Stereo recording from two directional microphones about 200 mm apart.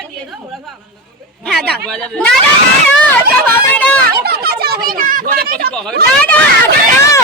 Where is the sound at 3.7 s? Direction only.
5° left (ahead or behind).